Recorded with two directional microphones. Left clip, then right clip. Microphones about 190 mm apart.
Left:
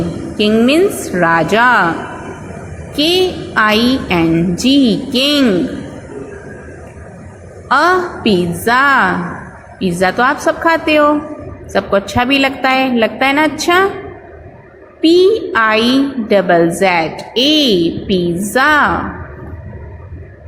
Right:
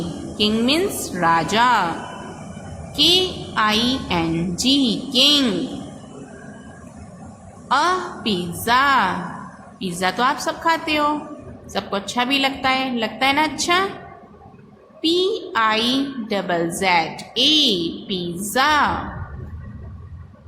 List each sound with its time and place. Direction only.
0.3 s a woman's voice: 20° left (ahead or behind)
2.9 s a woman's voice: 20° left (ahead or behind)
7.7 s a woman's voice: 20° left (ahead or behind)
15.0 s a woman's voice: 20° left (ahead or behind)